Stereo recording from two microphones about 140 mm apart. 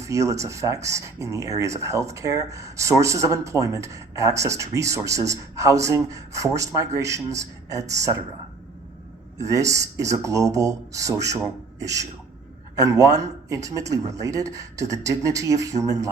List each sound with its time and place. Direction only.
0.0 s speech: 20° right (ahead or behind)
9.4 s speech: 25° right (ahead or behind)